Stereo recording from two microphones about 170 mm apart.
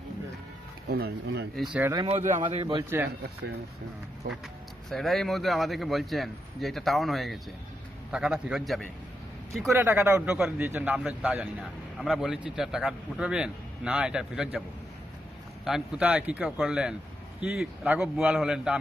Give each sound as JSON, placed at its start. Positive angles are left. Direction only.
{"t": 0.8, "sound": "speech", "side_deg": -75}
{"t": 1.6, "sound": "a man's voice", "side_deg": -5}
{"t": 2.0, "sound": "a man's voice", "side_deg": -45}
{"t": 2.4, "sound": "a man's voice", "side_deg": -30}
{"t": 4.8, "sound": "a man's voice", "side_deg": 0}
{"t": 9.7, "sound": "a man's voice", "side_deg": -15}
{"t": 15.6, "sound": "a man's voice", "side_deg": -5}